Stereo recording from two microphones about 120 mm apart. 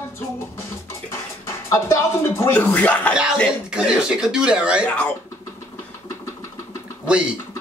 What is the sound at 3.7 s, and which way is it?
Speech, 5° right (ahead or behind).